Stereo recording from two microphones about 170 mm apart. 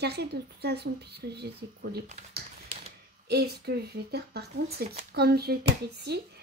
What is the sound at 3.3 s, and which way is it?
A woman's voice, 70° right (ahead or behind).